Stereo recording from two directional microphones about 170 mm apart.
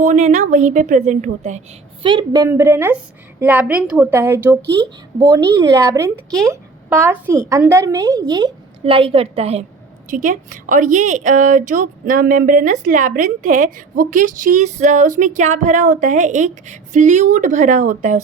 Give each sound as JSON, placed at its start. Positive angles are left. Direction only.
{"t": 0.0, "sound": "a woman's voice", "side_deg": -45}
{"t": 2.0, "sound": "a woman's voice", "side_deg": -25}
{"t": 10.1, "sound": "a woman's voice", "side_deg": -50}